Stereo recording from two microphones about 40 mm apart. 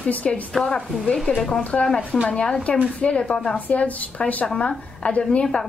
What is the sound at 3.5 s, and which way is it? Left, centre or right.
Speech, left.